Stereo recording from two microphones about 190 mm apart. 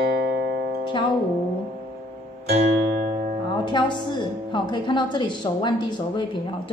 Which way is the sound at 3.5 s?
25° left (ahead or behind).